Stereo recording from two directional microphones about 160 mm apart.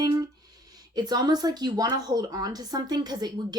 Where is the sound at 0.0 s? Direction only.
25° right (ahead or behind).